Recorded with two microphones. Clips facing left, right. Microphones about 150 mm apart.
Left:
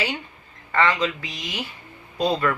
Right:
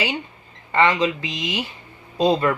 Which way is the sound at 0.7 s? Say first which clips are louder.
Right 3 dB; 20° right (ahead or behind).